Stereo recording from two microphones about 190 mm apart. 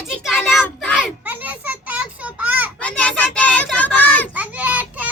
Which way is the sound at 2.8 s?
5° left (ahead or behind).